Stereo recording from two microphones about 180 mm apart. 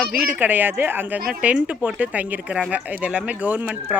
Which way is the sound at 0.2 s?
10° right (ahead or behind).